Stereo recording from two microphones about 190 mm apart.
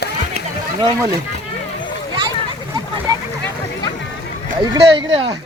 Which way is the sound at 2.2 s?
20° right (ahead or behind).